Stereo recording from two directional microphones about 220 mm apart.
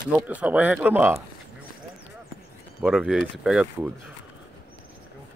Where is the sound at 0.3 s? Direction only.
5° right (ahead or behind).